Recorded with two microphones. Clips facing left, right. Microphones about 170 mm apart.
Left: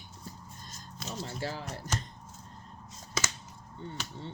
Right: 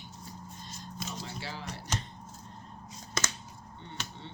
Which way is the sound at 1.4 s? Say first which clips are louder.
Left 5 dB; 45° left (ahead or behind).